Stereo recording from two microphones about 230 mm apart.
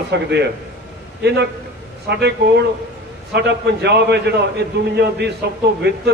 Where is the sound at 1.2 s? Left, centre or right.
Right.